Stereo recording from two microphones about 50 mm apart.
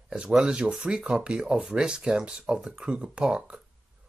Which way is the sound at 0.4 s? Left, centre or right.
Centre.